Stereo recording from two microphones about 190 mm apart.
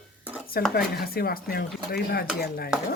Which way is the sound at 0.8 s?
50° left (ahead or behind).